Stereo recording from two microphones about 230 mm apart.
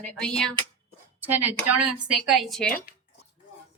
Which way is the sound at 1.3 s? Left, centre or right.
Right.